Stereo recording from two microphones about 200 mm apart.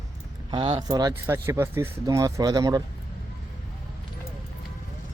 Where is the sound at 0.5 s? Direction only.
25° right (ahead or behind).